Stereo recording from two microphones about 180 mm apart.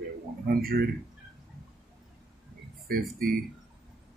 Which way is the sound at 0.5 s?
55° right (ahead or behind).